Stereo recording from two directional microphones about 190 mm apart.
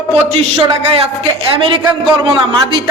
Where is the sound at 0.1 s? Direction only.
30° right (ahead or behind).